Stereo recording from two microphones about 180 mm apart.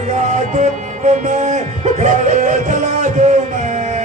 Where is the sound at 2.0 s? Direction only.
40° right (ahead or behind).